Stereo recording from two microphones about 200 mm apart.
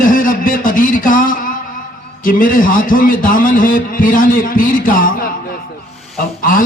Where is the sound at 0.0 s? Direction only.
45° left (ahead or behind).